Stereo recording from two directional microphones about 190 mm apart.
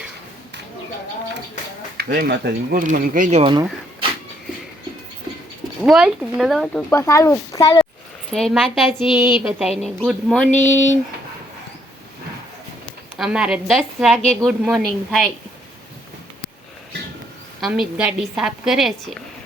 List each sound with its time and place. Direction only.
2.0 s speech: 55° right (ahead or behind)
2.8 s speech: 45° right (ahead or behind)
3.4 s speech: 25° right (ahead or behind)
5.8 s a woman's voice: 5° right (ahead or behind)
6.9 s speech: 15° left (ahead or behind)
8.3 s a woman's voice: 5° left (ahead or behind)
10.7 s speech: 40° left (ahead or behind)
13.1 s a woman's voice: 5° right (ahead or behind)
17.6 s a woman's voice: 5° right (ahead or behind)